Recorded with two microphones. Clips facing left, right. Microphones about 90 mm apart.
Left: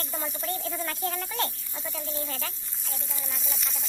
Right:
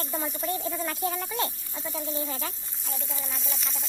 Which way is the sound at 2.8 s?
Centre (ahead or behind).